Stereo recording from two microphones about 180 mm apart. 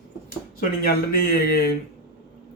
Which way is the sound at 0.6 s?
55° left (ahead or behind).